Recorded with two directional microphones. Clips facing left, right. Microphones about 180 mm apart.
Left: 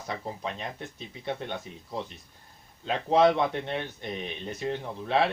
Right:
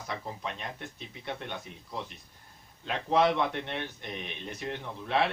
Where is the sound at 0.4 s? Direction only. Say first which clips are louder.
Left 3 dB; 30° left (ahead or behind).